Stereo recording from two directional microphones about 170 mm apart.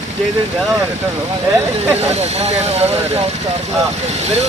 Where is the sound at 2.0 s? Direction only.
40° right (ahead or behind).